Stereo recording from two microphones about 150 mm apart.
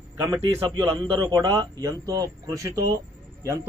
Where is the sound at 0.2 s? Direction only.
20° right (ahead or behind).